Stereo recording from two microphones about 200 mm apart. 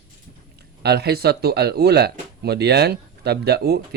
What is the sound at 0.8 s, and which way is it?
Speech, 55° right (ahead or behind).